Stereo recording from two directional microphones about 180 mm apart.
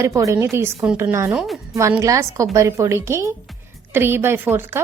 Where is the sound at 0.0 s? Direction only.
15° right (ahead or behind).